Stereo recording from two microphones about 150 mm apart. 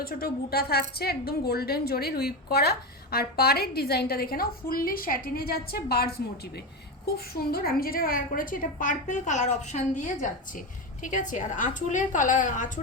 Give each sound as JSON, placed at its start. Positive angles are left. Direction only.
{"t": 0.0, "sound": "speech", "side_deg": 85}
{"t": 7.3, "sound": "a woman's voice", "side_deg": 90}